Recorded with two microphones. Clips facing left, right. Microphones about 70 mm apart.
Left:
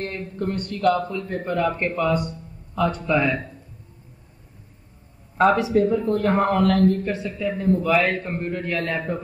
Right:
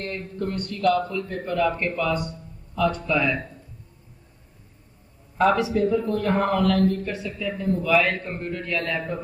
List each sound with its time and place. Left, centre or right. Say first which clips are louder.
0.0 s a man's voice: left 2 dB; left
5.7 s a man's voice: left 3 dB; left